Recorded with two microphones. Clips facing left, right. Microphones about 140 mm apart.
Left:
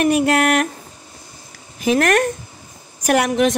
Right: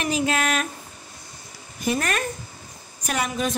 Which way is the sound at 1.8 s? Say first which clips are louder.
Left 9 dB; 80° left.